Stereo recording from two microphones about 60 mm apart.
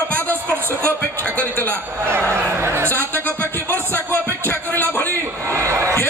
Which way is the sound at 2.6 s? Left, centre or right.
Right.